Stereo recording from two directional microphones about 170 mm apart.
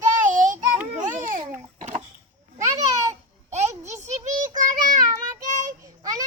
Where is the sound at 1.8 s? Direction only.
45° right (ahead or behind).